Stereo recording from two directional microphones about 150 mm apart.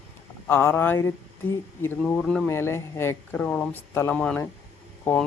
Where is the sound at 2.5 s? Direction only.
15° left (ahead or behind).